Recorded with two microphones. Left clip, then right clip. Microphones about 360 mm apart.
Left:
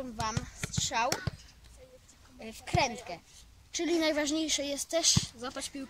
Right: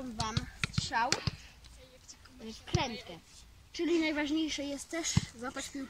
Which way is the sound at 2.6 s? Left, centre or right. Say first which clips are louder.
Left 6 dB; centre.